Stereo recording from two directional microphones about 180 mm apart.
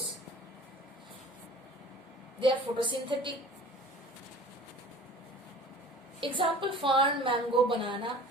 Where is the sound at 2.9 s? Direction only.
25° right (ahead or behind).